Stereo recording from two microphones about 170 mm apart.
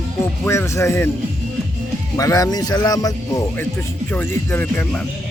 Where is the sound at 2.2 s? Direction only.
20° left (ahead or behind).